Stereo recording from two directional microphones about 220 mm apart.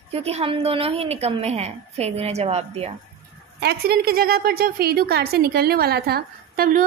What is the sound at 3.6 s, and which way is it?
A woman's voice, 45° right (ahead or behind).